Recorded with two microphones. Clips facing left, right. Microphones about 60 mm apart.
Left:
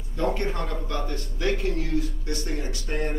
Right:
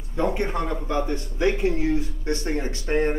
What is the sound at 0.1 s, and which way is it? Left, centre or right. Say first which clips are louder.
A man's voice: right 2 dB; centre.